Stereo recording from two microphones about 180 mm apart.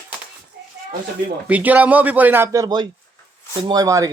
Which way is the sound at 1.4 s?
10° right (ahead or behind).